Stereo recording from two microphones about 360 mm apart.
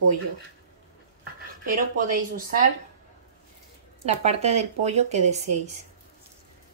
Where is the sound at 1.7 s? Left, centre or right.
Right.